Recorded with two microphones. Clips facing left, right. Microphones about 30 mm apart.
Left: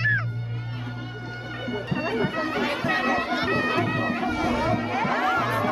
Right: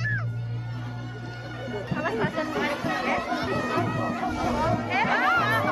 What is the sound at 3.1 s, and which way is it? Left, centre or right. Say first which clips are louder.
Music: left 3 dB; left.